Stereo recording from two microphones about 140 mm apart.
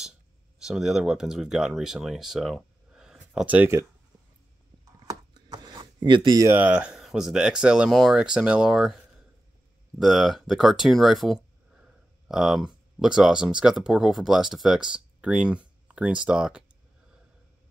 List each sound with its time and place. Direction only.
0.6 s speech: 5° right (ahead or behind)
5.0 s a sound: 30° right (ahead or behind)
6.5 s speech: 10° right (ahead or behind)